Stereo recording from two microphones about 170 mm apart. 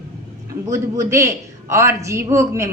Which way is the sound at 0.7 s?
15° right (ahead or behind).